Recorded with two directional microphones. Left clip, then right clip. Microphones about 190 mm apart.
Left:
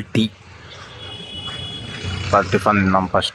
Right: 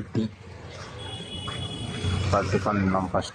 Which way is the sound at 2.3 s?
20° left (ahead or behind).